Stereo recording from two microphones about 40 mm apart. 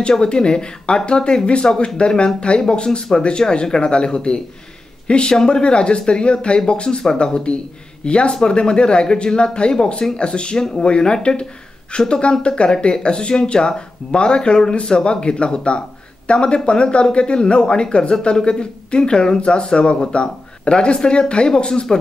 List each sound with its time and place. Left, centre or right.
0.1 s speech: left
5.3 s speech: centre
5.6 s speech: left